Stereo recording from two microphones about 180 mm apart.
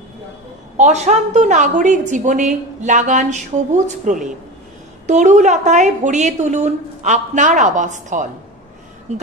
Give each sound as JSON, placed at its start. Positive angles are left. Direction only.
{"t": 0.7, "sound": "a woman's voice", "side_deg": -40}